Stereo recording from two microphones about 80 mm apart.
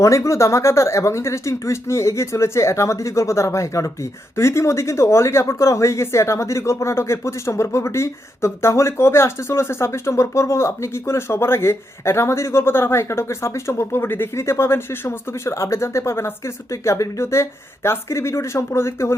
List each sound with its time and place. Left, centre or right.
0.0 s speech: left